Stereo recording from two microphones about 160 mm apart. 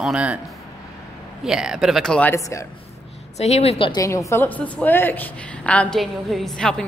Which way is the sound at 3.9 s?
20° left (ahead or behind).